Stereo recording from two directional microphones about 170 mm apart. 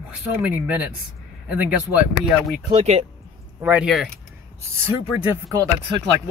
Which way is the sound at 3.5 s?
10° right (ahead or behind).